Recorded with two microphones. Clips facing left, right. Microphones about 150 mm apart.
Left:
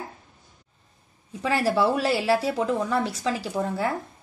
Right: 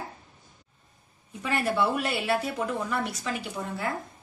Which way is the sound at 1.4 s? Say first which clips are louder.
Left 4 dB; 30° left (ahead or behind).